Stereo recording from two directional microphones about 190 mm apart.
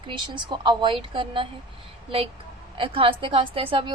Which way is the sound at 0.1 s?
25° right (ahead or behind).